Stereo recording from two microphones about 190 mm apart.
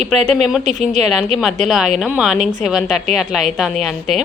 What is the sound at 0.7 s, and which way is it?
Speech, 40° right (ahead or behind).